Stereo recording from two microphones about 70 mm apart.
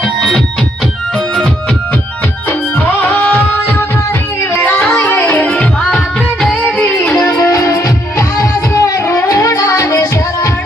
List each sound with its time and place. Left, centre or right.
0.0 s music: centre
3.0 s music: left
7.3 s music: left
8.7 s singing: left